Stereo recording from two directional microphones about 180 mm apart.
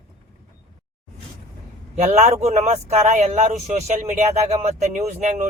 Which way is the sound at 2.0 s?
40° right (ahead or behind).